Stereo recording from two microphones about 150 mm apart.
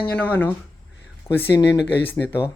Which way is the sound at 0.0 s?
10° left (ahead or behind).